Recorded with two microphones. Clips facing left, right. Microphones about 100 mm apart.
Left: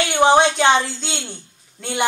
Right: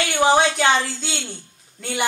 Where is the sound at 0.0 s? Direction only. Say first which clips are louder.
Left 3 dB; 20° left (ahead or behind).